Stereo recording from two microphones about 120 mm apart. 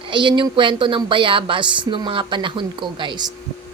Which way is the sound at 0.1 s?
40° right (ahead or behind).